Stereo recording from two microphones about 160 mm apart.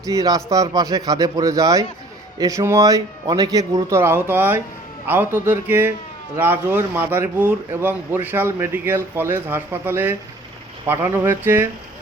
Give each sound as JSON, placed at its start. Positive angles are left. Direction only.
{"t": 0.0, "sound": "speech", "side_deg": -20}